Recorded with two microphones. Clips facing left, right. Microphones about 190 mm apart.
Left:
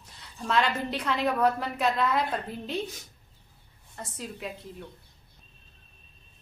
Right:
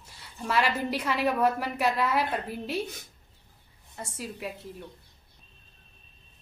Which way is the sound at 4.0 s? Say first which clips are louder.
Right 1 dB; 10° right (ahead or behind).